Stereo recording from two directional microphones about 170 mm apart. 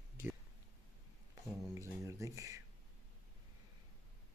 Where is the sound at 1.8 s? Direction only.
15° right (ahead or behind).